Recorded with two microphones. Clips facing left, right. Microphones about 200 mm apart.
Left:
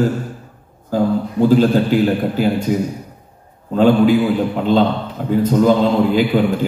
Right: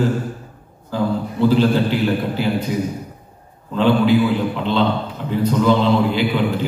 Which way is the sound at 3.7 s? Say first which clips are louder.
Left 3 dB; 45° left (ahead or behind).